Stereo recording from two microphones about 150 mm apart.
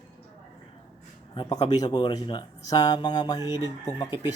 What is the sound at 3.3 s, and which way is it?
Speech, 20° right (ahead or behind).